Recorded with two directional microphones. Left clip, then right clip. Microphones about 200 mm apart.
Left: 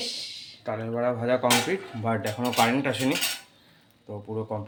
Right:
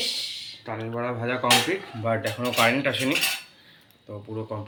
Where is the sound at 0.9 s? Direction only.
65° left (ahead or behind).